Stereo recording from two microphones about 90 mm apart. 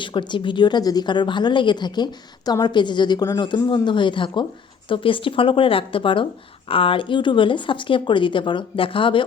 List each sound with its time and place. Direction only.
0.0 s a woman's voice: 60° left (ahead or behind)
6.7 s speech: 85° left